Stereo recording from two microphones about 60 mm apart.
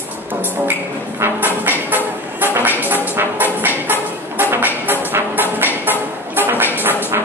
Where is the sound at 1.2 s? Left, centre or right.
Right.